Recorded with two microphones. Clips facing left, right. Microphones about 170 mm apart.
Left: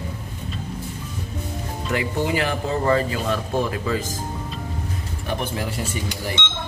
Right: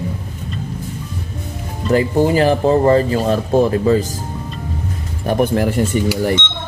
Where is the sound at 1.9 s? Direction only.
35° right (ahead or behind).